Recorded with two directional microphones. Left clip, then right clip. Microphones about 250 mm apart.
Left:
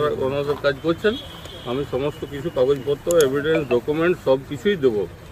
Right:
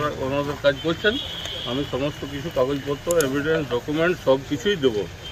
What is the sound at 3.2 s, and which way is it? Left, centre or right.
Speech, left.